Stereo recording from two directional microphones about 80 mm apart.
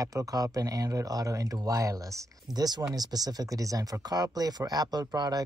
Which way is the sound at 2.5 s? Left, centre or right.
Right.